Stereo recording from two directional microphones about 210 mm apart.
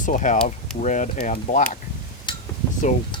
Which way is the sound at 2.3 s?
25° left (ahead or behind).